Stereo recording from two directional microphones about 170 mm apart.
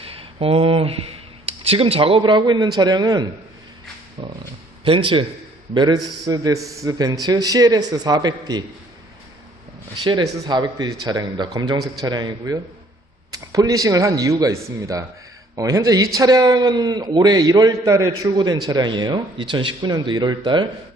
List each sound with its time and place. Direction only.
0.1 s a man's voice: 35° right (ahead or behind)
9.9 s a man's voice: 25° right (ahead or behind)